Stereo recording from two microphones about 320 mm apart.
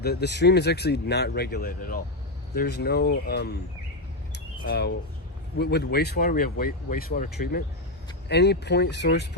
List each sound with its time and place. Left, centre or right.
0.0 s speech: left
4.3 s a sound: left
5.5 s speech: left